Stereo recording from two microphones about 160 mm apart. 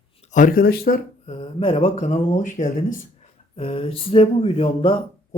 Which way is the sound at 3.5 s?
35° left (ahead or behind).